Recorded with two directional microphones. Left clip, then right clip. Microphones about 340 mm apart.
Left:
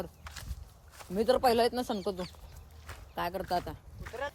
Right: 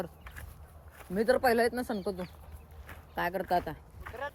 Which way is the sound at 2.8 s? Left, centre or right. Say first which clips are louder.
Right 2 dB; centre.